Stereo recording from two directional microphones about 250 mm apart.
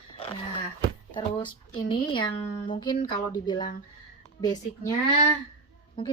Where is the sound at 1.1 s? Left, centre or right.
Centre.